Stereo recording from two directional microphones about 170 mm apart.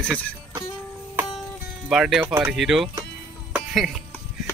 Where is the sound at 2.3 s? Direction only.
15° right (ahead or behind).